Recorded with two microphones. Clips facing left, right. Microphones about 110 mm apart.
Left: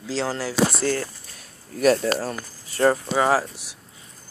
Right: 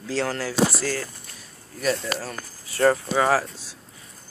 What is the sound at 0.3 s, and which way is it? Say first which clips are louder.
Speech: left 2 dB; 15° left (ahead or behind).